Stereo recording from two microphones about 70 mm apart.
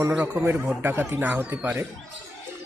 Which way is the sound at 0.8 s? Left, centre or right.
Right.